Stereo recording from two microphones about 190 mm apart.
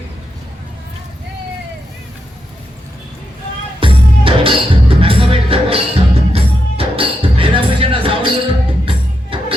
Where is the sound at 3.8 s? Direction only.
30° right (ahead or behind).